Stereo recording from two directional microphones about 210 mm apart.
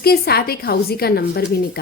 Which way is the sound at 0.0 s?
50° left (ahead or behind).